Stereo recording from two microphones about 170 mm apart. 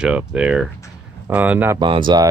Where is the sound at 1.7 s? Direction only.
30° right (ahead or behind).